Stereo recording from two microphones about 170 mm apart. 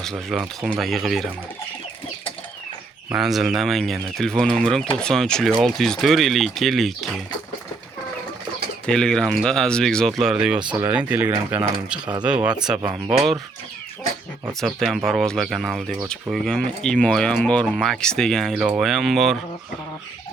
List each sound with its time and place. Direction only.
0.0 s speech: centre (ahead or behind)
3.1 s speech: centre (ahead or behind)
8.9 s speech: 5° left (ahead or behind)
10.6 s speech: 25° right (ahead or behind)
10.8 s speech: 10° right (ahead or behind)
14.6 s speech: centre (ahead or behind)